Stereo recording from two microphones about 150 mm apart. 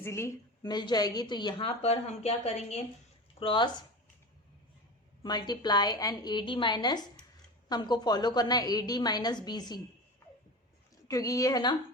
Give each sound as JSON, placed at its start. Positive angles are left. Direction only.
{"t": 0.0, "sound": "a woman's voice", "side_deg": 20}
{"t": 3.4, "sound": "speech", "side_deg": 35}
{"t": 5.2, "sound": "a woman's voice", "side_deg": 30}
{"t": 11.1, "sound": "a woman's voice", "side_deg": 20}